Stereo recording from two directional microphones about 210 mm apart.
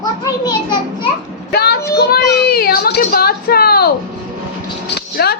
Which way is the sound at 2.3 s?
50° left (ahead or behind).